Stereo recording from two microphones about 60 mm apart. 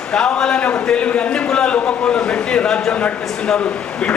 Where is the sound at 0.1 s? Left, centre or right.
Centre.